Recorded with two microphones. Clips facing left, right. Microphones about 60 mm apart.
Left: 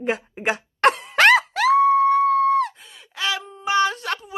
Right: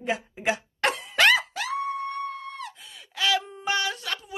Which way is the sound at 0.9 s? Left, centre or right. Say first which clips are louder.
Left 2 dB; left.